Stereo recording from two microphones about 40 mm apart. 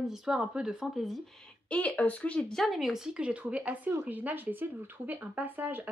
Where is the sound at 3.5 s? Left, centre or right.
Right.